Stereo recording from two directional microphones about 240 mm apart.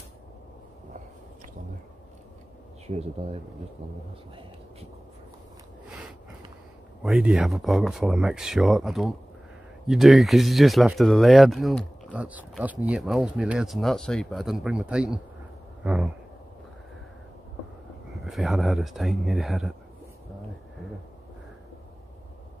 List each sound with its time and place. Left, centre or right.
3.0 s speech: right
7.0 s speech: centre
18.2 s speech: centre